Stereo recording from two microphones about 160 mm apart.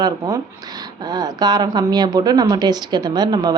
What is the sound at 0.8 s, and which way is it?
Speech, 25° right (ahead or behind).